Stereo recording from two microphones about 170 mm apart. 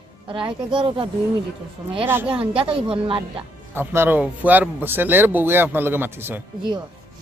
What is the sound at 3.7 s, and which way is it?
Speech, 10° right (ahead or behind).